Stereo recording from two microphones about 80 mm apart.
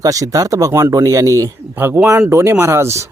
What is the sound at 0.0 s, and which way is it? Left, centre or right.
Speech, right.